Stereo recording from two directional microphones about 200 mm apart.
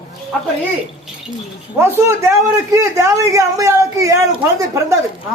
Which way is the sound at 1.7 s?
10° right (ahead or behind).